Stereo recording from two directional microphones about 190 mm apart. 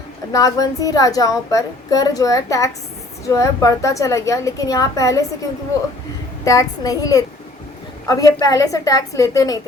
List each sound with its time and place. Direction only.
0.3 s a woman's voice: 20° left (ahead or behind)
6.4 s a woman's voice: 15° left (ahead or behind)